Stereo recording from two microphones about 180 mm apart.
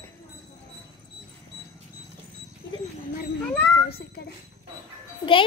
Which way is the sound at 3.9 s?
60° left (ahead or behind).